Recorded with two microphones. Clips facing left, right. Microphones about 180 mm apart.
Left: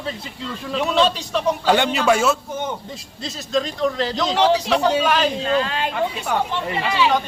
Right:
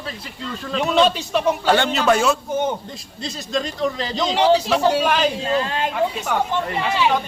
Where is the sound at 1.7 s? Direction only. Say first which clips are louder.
Left 1 dB; 10° left (ahead or behind); by 5.3 s 5° right (ahead or behind).